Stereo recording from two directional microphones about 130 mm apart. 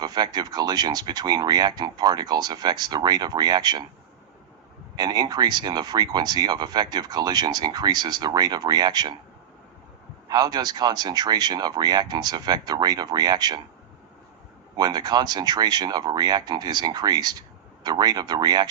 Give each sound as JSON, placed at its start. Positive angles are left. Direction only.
{"t": 0.0, "sound": "speech", "side_deg": -30}
{"t": 4.9, "sound": "speech", "side_deg": -30}
{"t": 10.2, "sound": "speech", "side_deg": -30}
{"t": 14.8, "sound": "speech", "side_deg": -30}